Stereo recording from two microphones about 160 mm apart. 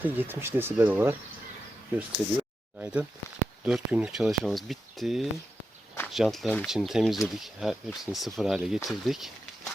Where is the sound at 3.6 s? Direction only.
5° right (ahead or behind).